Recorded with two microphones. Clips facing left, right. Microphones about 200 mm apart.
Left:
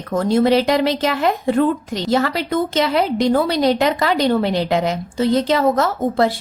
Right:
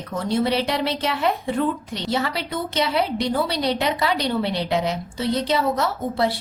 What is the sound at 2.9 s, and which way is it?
Speech, 90° left.